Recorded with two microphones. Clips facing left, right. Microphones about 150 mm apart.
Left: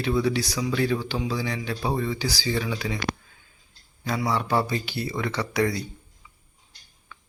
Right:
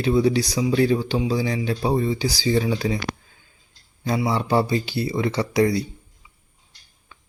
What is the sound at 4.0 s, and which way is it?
Speech, 25° right (ahead or behind).